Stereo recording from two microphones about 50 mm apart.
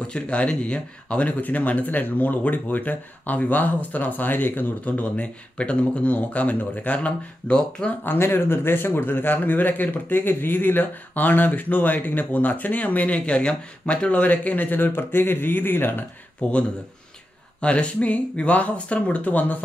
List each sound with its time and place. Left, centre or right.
0.0 s speech: left
8.2 s speech: left
16.4 s speech: left